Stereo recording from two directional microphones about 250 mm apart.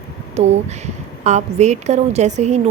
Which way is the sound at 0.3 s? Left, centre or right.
Right.